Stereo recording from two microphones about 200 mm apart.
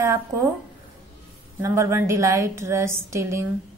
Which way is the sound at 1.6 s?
15° right (ahead or behind).